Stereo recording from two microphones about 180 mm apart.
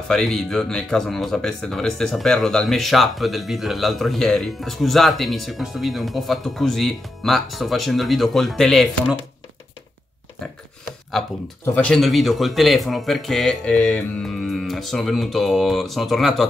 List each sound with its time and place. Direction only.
0.1 s speech: centre (ahead or behind)
11.1 s speech: centre (ahead or behind)